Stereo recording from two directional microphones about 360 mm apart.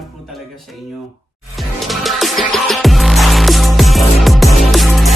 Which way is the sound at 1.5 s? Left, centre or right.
Centre.